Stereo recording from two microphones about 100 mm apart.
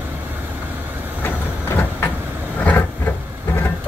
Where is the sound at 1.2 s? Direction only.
20° left (ahead or behind).